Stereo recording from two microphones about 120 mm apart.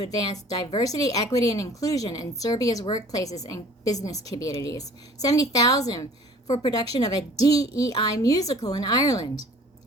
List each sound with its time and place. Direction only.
0.0 s a woman's voice: 35° left (ahead or behind)